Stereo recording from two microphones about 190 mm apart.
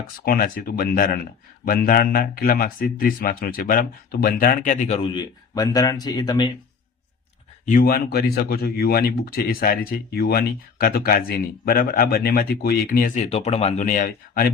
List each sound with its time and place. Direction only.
0.3 s speech: 50° left (ahead or behind); by 6.5 s 20° left (ahead or behind)
7.6 s speech: 45° left (ahead or behind)